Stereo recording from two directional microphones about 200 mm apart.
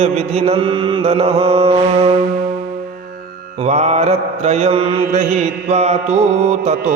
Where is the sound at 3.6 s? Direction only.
35° right (ahead or behind).